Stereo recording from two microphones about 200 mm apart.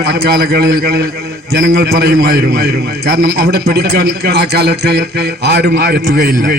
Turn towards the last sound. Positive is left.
turn(degrees=-55)  # may be behind; listen again after turning